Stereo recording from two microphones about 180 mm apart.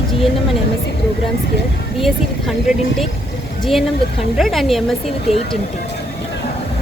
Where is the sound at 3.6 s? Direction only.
Centre (ahead or behind).